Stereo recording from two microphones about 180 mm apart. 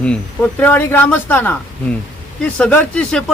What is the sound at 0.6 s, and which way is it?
Speech, 10° left (ahead or behind).